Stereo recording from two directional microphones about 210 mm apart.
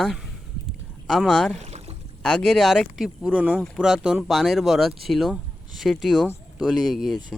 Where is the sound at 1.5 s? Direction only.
30° right (ahead or behind).